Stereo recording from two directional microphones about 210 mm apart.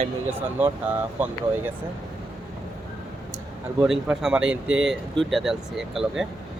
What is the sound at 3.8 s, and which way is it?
Speech, 5° right (ahead or behind).